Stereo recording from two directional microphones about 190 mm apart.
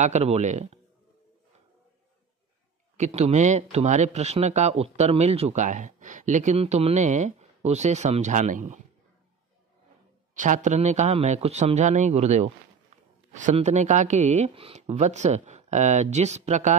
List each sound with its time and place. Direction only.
0.0 s speech: 35° right (ahead or behind)
3.0 s speech: 35° right (ahead or behind)
10.3 s speech: 40° right (ahead or behind)